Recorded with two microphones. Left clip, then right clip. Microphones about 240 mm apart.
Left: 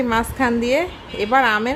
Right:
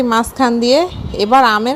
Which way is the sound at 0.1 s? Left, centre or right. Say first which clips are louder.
Right 5 dB; right.